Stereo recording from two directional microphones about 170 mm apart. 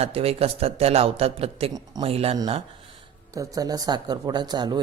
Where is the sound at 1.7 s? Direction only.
25° right (ahead or behind).